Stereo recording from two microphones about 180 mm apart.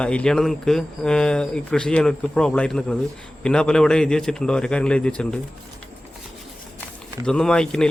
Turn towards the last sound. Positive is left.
turn(degrees=5)  # may be behind; listen again after turning